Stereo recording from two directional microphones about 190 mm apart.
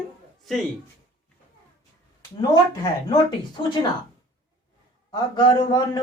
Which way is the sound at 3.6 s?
20° left (ahead or behind).